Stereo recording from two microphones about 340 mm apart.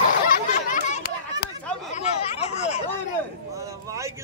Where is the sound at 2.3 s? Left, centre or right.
Centre.